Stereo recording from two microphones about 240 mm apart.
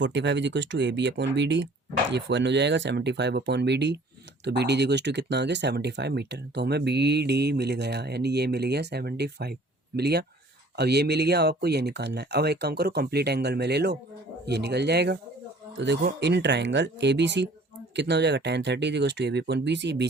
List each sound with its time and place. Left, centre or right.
0.0 s speech: right